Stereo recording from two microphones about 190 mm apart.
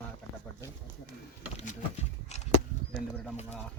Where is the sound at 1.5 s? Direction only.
40° left (ahead or behind).